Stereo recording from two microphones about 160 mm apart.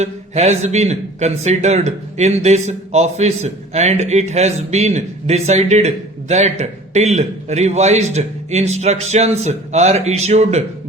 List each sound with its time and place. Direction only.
0.0 s a man's voice: 45° right (ahead or behind)